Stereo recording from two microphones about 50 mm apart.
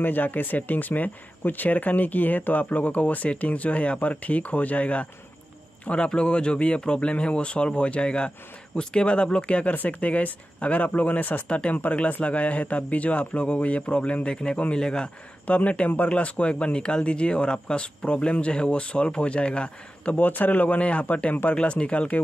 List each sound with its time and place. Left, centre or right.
0.0 s a man's voice: left; by 15.0 s centre
15.4 s speech: left
20.2 s speech: left